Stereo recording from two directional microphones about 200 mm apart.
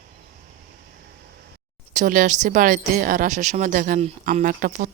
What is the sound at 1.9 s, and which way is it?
Speech, 40° right (ahead or behind).